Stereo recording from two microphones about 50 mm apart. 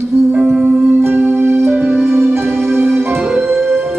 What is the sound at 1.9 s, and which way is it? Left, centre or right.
Music, centre.